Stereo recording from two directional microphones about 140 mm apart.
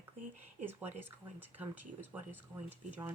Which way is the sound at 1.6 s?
15° right (ahead or behind).